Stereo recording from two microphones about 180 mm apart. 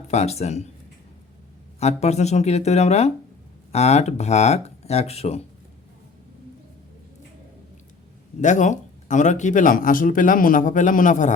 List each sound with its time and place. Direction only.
0.1 s speech: 35° left (ahead or behind)
1.8 s speech: 35° left (ahead or behind)
8.4 s speech: 45° left (ahead or behind)